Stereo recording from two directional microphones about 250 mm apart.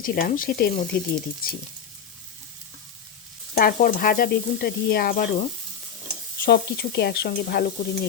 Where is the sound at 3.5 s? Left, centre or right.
Left.